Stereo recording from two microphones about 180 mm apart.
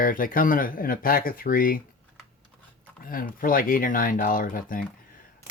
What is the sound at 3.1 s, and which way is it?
Speech, 50° left (ahead or behind).